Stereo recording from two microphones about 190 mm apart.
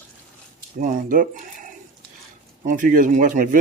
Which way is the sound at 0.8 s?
45° right (ahead or behind).